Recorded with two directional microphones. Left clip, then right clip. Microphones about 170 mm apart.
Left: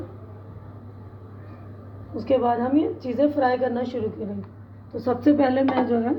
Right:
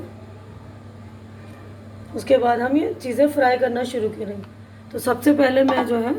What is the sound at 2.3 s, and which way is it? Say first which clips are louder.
A woman's voice: right 4 dB; 25° right (ahead or behind).